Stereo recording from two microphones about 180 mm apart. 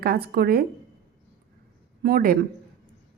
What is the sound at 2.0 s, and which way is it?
Speech, 55° right (ahead or behind).